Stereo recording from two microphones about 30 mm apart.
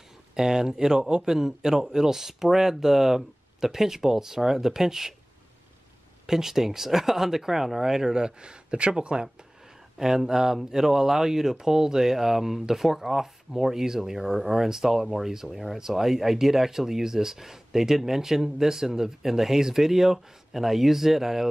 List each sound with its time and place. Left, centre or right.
0.4 s speech: centre
6.2 s speech: centre
8.0 s speech: right
9.9 s speech: centre